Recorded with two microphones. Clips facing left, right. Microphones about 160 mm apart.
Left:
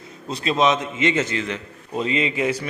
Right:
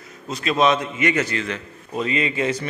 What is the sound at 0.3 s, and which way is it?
Speech, 30° left (ahead or behind).